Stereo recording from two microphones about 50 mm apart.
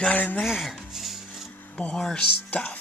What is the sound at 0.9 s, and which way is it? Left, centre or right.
Dishes, centre.